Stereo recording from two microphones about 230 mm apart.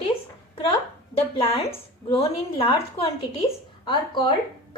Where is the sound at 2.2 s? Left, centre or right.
Left.